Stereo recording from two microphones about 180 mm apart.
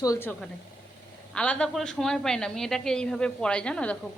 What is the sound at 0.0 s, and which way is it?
Speech, 15° left (ahead or behind).